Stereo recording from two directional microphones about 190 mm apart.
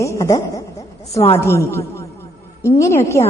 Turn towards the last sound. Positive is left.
turn(degrees=15)  # may be behind; listen again after turning